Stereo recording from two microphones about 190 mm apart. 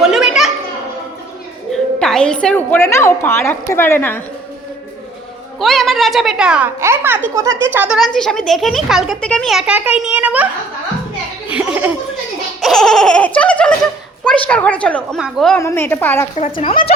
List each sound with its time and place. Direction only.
0.0 s children playing: centre (ahead or behind)
1.7 s a woman's voice: 5° left (ahead or behind)
5.5 s speech: centre (ahead or behind)
11.5 s a woman's voice: 5° right (ahead or behind)
15.5 s a woman's voice: 15° left (ahead or behind)
16.4 s speech: 30° left (ahead or behind)